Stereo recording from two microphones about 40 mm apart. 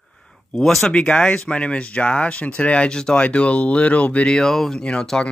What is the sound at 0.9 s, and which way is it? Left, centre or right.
Speech, left.